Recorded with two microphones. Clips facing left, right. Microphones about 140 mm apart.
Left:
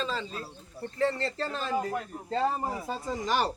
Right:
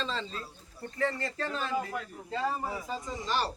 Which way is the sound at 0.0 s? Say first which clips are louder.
Left 2 dB; 5° left (ahead or behind).